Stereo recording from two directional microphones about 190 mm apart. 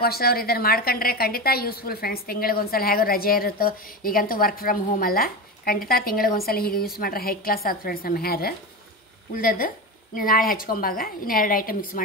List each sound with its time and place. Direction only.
0.0 s a woman's voice: 55° left (ahead or behind)